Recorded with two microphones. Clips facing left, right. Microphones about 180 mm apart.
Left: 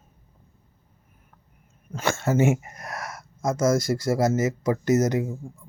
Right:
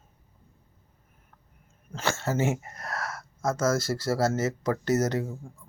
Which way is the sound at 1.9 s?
15° left (ahead or behind).